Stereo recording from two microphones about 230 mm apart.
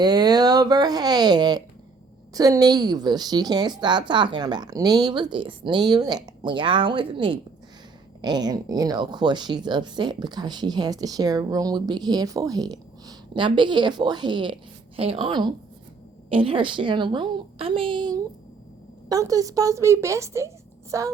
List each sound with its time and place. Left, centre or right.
0.0 s speech: centre